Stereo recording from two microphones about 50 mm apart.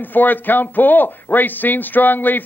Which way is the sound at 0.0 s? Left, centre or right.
Left.